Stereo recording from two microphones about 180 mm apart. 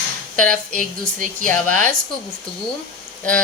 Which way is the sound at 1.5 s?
10° left (ahead or behind).